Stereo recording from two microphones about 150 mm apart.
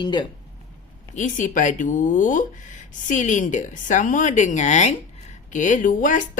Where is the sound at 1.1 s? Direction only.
55° left (ahead or behind).